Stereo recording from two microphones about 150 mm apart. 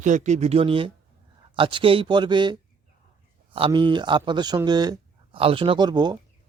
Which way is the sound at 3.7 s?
30° right (ahead or behind).